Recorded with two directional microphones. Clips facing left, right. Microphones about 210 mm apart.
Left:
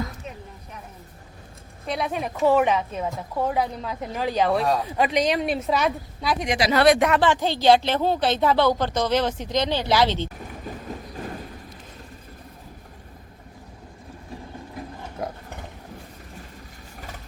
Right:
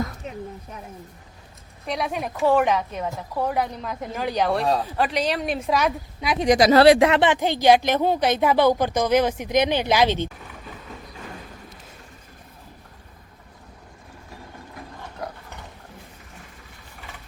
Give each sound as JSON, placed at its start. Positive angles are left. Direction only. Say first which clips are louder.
{"t": 2.0, "sound": "a woman's voice", "louder": "left 1 dB", "side_deg": 0}
{"t": 6.4, "sound": "speech", "louder": "right 5 dB", "side_deg": -40}
{"t": 15.2, "sound": "a sound", "louder": "left 3 dB", "side_deg": 25}